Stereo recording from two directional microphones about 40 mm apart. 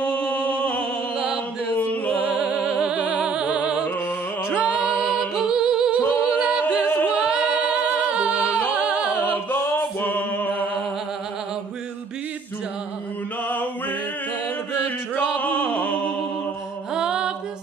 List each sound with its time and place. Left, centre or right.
0.0 s music: left
1.1 s mantra: right
2.1 s music: right
4.9 s music: centre
5.9 s a capella: right
7.6 s music: right
9.5 s music: left
15.3 s music: left
16.9 s music: centre